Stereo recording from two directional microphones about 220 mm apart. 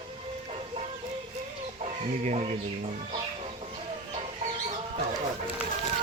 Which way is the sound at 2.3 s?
30° right (ahead or behind).